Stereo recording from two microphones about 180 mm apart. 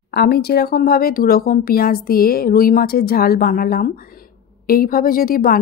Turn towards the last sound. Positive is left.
turn(degrees=55)  # may be behind; listen again after turning